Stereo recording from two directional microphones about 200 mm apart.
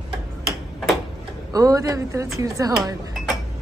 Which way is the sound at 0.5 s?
Centre (ahead or behind).